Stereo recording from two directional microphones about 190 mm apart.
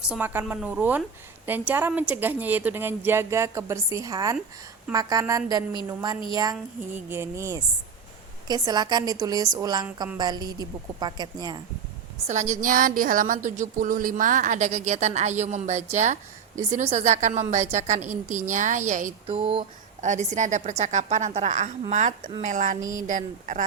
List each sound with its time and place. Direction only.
0.1 s a woman's voice: 5° right (ahead or behind)
12.3 s a woman's voice: 40° right (ahead or behind)